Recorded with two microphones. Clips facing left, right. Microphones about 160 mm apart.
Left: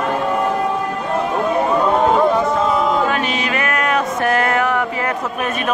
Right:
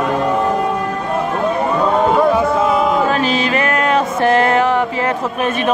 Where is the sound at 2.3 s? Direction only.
5° right (ahead or behind).